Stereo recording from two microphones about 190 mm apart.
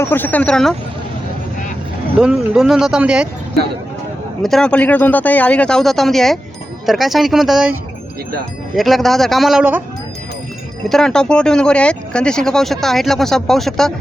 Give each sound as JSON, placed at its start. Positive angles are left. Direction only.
{"t": 0.0, "sound": "speech", "side_deg": 10}
{"t": 2.1, "sound": "speech", "side_deg": -5}
{"t": 4.4, "sound": "speech", "side_deg": 5}
{"t": 10.8, "sound": "speech", "side_deg": 5}